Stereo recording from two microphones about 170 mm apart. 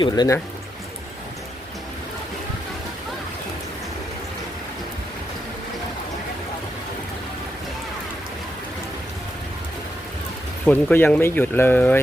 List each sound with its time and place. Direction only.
0.0 s speech: 25° left (ahead or behind)
10.7 s speech: 10° left (ahead or behind)